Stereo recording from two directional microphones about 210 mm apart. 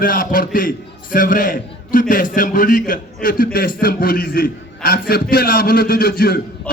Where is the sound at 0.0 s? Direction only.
40° left (ahead or behind).